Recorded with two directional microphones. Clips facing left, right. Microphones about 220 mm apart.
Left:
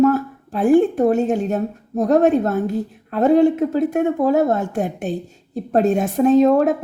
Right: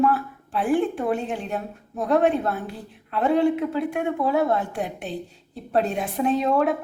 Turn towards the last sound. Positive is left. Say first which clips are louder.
# left 8 dB
turn(degrees=45)  # may be behind; listen again after turning